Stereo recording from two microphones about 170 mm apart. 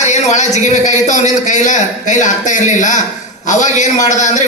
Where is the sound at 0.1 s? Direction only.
45° left (ahead or behind).